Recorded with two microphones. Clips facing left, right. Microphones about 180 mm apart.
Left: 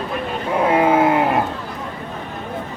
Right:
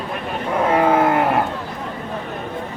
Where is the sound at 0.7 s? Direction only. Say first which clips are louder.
Left 1 dB; 10° left (ahead or behind).